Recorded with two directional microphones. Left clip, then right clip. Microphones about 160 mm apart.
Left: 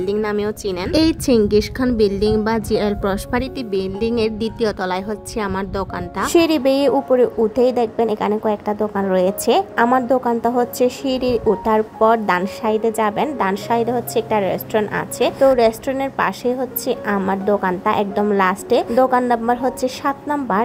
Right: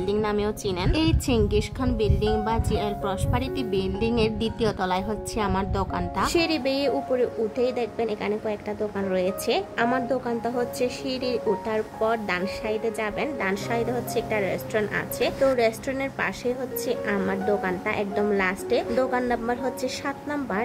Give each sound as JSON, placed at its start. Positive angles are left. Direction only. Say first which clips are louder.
{"t": 0.1, "sound": "a woman's voice", "louder": "left 3 dB", "side_deg": 30}